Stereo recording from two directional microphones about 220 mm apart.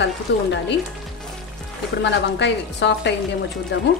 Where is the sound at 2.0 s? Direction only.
50° left (ahead or behind).